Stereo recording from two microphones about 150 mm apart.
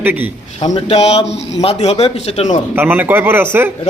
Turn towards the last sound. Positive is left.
turn(degrees=-15)  # may be behind; listen again after turning